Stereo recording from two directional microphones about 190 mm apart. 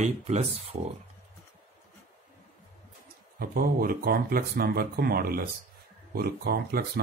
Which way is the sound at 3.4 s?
50° right (ahead or behind).